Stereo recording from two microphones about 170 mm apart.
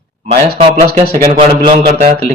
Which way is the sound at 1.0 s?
30° right (ahead or behind).